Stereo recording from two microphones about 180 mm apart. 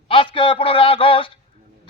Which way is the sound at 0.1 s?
30° left (ahead or behind).